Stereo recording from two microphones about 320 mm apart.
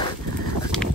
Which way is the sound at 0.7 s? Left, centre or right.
Centre.